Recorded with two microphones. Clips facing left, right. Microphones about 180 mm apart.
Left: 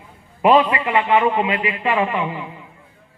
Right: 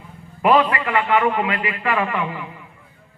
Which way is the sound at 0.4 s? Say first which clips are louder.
Left 2 dB; 20° left (ahead or behind).